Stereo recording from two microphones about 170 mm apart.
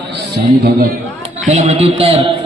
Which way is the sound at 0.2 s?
60° right (ahead or behind).